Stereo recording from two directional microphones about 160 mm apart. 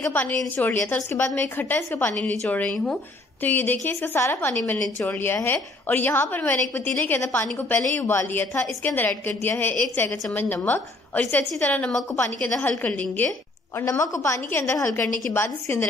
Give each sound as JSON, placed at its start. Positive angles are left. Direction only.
{"t": 0.0, "sound": "a woman's voice", "side_deg": 10}